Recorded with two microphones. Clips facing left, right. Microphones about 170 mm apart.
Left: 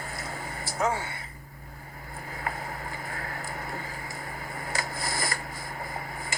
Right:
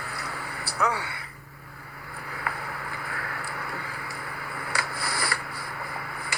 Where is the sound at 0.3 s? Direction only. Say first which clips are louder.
Even; 20° left (ahead or behind).